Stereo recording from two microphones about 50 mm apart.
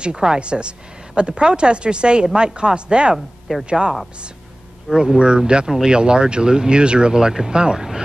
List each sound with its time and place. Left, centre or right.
0.0 s speech: centre
4.9 s speech: centre